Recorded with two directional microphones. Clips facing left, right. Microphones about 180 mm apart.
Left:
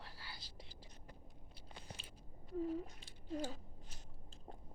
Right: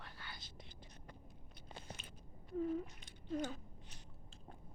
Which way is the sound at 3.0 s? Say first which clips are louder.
Right 2 dB; 30° left (ahead or behind).